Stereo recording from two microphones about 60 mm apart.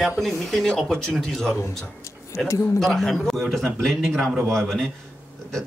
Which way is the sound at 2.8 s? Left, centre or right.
Centre.